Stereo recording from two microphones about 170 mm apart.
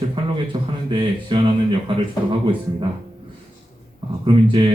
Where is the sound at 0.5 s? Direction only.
30° right (ahead or behind).